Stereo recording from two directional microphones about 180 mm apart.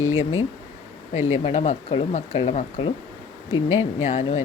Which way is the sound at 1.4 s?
35° left (ahead or behind).